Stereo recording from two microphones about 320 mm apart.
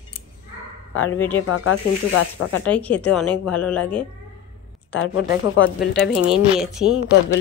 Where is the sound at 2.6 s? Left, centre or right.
Centre.